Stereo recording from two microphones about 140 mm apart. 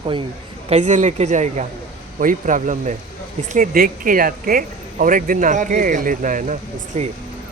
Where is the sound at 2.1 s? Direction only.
70° right (ahead or behind).